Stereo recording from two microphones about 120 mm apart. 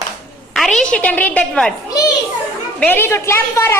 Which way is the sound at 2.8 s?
15° left (ahead or behind).